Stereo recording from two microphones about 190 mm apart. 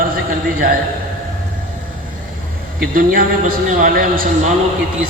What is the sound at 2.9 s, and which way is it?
A man's voice, 50° right (ahead or behind).